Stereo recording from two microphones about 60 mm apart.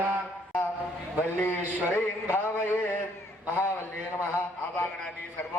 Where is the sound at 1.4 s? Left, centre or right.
Left.